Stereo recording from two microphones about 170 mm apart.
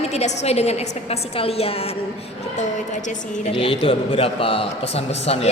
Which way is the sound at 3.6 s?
30° left (ahead or behind).